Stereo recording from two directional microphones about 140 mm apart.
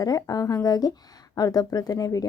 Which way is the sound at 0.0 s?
25° left (ahead or behind).